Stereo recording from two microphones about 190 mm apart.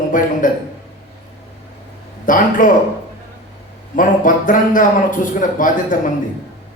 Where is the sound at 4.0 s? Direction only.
45° left (ahead or behind).